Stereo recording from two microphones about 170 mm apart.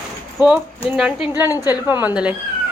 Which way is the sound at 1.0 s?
5° right (ahead or behind).